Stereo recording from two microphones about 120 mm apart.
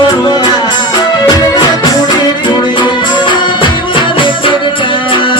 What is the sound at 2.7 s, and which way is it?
Music, 40° left (ahead or behind).